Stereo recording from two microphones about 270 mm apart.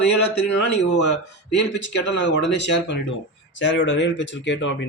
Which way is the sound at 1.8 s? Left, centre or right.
Left.